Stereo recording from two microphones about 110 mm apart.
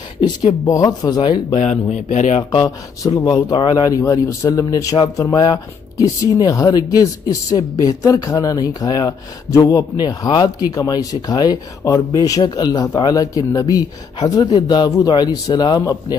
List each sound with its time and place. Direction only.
0.2 s speech: 45° left (ahead or behind)
0.7 s speech: 35° left (ahead or behind)
1.6 s speech: 90° left
3.1 s speech: 40° left (ahead or behind)